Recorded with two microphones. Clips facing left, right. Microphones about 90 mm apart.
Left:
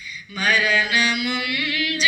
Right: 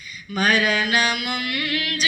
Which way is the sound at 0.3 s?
40° right (ahead or behind).